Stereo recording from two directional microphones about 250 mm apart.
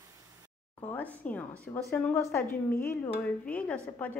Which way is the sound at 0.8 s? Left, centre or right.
Centre.